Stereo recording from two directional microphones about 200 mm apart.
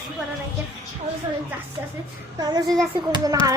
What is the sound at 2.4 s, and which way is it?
Speech, 20° right (ahead or behind).